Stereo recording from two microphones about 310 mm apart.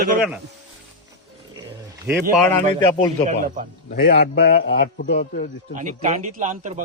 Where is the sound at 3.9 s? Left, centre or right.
Left.